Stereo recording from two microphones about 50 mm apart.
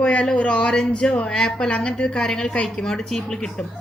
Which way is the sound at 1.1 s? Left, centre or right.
Left.